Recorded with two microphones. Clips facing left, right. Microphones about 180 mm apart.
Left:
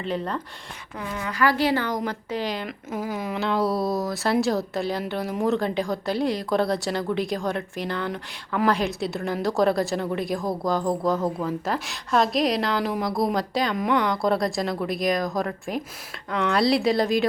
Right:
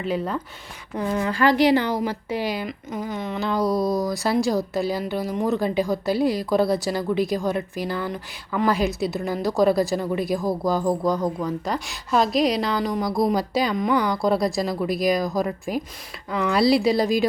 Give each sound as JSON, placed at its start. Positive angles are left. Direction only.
{"t": 0.0, "sound": "speech", "side_deg": -5}
{"t": 0.9, "sound": "speech", "side_deg": -35}
{"t": 1.5, "sound": "speech", "side_deg": -15}
{"t": 2.9, "sound": "speech", "side_deg": 5}